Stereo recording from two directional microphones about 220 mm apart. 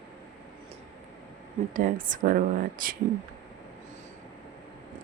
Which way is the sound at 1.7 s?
40° right (ahead or behind).